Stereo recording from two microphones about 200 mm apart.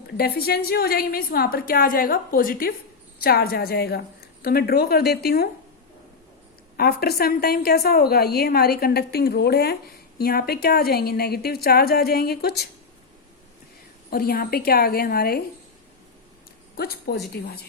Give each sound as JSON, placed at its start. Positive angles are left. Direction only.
{"t": 0.2, "sound": "a woman's voice", "side_deg": 50}
{"t": 6.7, "sound": "a woman's voice", "side_deg": 50}
{"t": 14.1, "sound": "a woman's voice", "side_deg": 50}
{"t": 16.7, "sound": "a woman's voice", "side_deg": 50}